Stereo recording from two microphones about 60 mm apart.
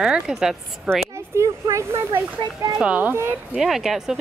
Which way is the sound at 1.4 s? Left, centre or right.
Right.